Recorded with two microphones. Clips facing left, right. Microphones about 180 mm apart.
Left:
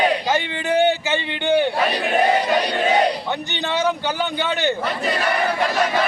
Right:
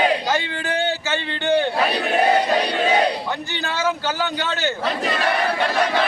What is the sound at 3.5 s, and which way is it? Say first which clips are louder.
A man's voice: left 3 dB; 20° left (ahead or behind).